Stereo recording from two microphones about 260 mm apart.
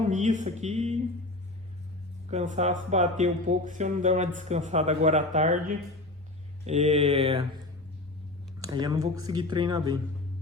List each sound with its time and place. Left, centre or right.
0.1 s speech: right
2.3 s speech: right
6.7 s speech: right
8.7 s speech: centre